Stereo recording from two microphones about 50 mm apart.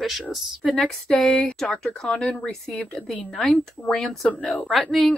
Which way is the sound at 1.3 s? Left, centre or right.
Centre.